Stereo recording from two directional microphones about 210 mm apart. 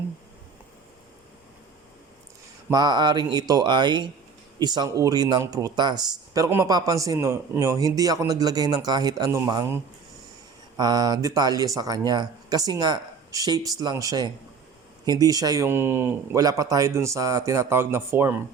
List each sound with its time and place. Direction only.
2.6 s speech: 20° right (ahead or behind)